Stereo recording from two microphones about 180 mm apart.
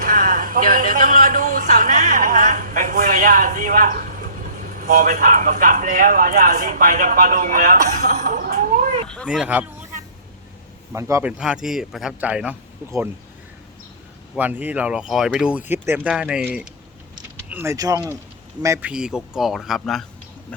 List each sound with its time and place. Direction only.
0.0 s speech: 45° right (ahead or behind)
8.3 s cat: 45° right (ahead or behind)
9.0 s speech: centre (ahead or behind)
10.9 s speech: 10° right (ahead or behind)
14.3 s speech: 10° right (ahead or behind)